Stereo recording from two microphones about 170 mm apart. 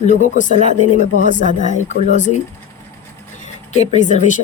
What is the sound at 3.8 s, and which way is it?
Speech, 45° left (ahead or behind).